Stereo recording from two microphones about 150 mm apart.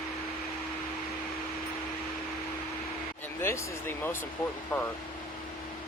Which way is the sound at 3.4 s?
15° left (ahead or behind).